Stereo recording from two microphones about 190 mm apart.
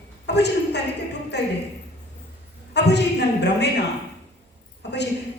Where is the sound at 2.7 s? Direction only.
60° left (ahead or behind).